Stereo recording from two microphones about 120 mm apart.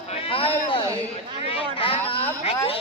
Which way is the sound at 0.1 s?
50° left (ahead or behind).